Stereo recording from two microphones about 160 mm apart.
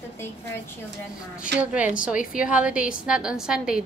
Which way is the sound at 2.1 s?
60° left (ahead or behind).